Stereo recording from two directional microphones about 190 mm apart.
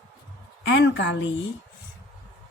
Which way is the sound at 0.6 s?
70° left (ahead or behind).